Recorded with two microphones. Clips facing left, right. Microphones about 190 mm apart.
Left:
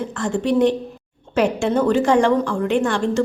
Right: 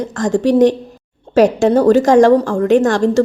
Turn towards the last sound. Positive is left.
turn(degrees=-40)  # may be behind; listen again after turning